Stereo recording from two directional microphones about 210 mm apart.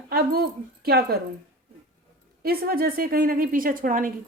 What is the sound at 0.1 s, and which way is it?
A woman's voice, 45° right (ahead or behind).